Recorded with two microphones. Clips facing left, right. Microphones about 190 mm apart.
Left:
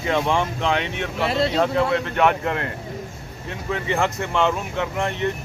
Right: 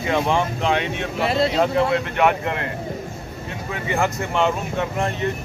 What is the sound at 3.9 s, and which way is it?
Speech, 10° right (ahead or behind).